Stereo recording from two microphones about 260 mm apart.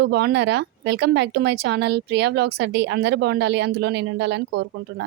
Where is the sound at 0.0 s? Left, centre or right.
Right.